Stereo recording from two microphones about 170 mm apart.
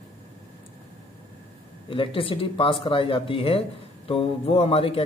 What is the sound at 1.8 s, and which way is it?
A man's voice, 30° left (ahead or behind).